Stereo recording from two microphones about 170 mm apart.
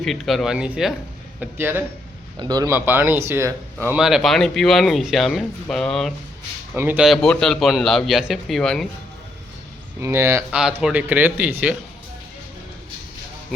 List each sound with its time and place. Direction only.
0.0 s a man's voice: centre (ahead or behind)
2.4 s a man's voice: 25° right (ahead or behind)
3.8 s speech: 5° right (ahead or behind)
6.7 s speech: 10° right (ahead or behind)
10.0 s a man's voice: 15° right (ahead or behind)
10.5 s a man's voice: 5° right (ahead or behind)